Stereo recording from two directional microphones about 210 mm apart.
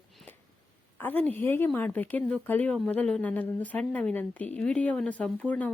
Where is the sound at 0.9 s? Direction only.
10° left (ahead or behind).